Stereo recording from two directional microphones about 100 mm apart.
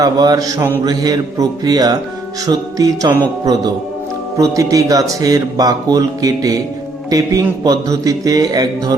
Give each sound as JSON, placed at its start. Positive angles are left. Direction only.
{"t": 0.0, "sound": "speech", "side_deg": -35}